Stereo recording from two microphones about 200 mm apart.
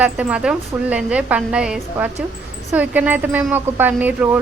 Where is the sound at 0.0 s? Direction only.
5° right (ahead or behind).